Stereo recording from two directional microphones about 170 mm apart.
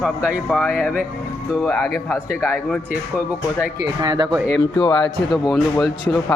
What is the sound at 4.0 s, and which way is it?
Speech, 25° right (ahead or behind).